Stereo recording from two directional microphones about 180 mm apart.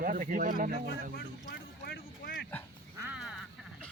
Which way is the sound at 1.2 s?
60° left (ahead or behind).